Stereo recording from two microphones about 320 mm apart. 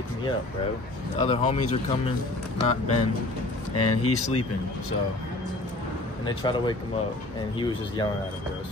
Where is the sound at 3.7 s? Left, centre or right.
Left.